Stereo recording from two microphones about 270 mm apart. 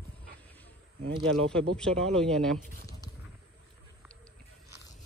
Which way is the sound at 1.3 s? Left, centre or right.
Centre.